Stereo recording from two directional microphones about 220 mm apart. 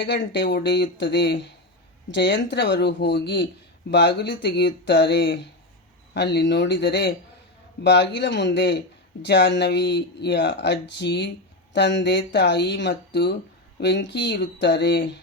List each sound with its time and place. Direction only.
0.0 s speech: 50° left (ahead or behind)
4.4 s speech: 50° left (ahead or behind)